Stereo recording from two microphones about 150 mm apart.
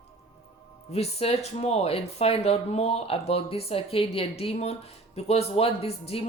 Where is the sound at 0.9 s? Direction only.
45° left (ahead or behind).